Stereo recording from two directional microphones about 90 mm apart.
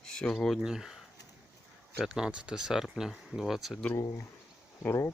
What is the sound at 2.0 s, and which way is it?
Speech, 5° right (ahead or behind).